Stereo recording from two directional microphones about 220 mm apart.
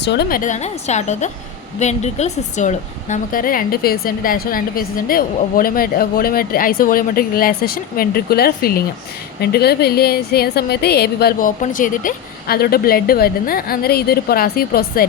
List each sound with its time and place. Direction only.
0.0 s a woman's voice: 50° left (ahead or behind)